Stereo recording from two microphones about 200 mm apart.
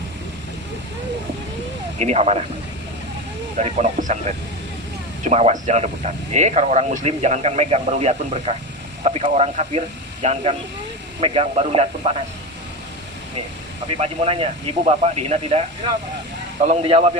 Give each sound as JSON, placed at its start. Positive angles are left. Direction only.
{"t": 2.0, "sound": "speech", "side_deg": -30}
{"t": 3.6, "sound": "speech", "side_deg": -35}
{"t": 5.2, "sound": "speech", "side_deg": -35}
{"t": 13.8, "sound": "speech", "side_deg": -30}
{"t": 16.6, "sound": "speech", "side_deg": -30}